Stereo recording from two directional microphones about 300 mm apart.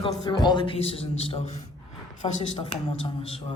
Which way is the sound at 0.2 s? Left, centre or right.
Centre.